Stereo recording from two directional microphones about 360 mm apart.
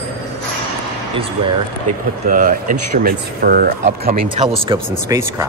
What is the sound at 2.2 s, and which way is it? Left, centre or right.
Speech, right.